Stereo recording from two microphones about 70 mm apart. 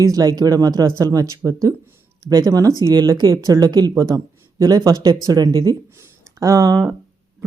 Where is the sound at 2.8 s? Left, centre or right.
Right.